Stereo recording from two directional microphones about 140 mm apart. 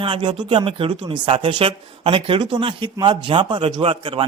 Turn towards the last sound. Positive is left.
turn(degrees=-40)  # may be behind; listen again after turning